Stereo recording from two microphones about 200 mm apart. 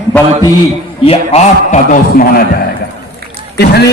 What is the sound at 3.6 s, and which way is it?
Speech, 55° left (ahead or behind).